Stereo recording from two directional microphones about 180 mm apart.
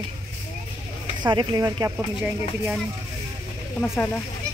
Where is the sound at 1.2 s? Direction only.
25° right (ahead or behind).